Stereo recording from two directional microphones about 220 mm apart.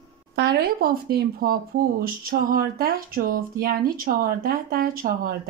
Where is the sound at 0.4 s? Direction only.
50° right (ahead or behind).